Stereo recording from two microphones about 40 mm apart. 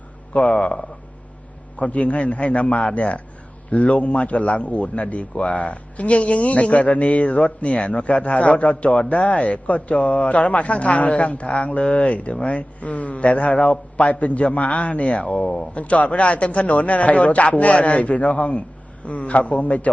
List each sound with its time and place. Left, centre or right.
0.3 s a man's voice: centre
1.8 s a man's voice: left